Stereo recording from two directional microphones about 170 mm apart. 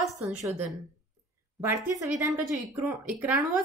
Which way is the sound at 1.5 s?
15° right (ahead or behind).